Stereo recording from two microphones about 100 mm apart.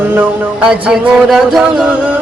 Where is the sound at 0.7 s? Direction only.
5° right (ahead or behind).